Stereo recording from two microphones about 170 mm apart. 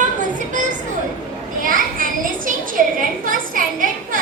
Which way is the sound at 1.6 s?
55° right (ahead or behind).